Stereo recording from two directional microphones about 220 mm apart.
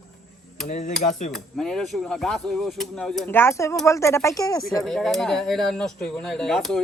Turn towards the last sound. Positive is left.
turn(degrees=0)  # may be behind; listen again after turning